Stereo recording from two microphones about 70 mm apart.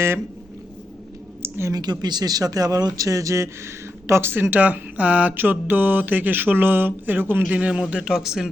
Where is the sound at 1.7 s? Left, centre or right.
Right.